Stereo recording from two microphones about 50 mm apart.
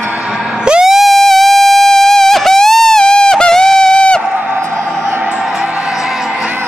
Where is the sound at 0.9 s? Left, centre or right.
Centre.